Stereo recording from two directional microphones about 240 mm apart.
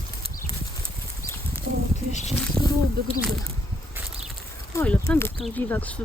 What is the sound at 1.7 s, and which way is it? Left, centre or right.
Speech, right.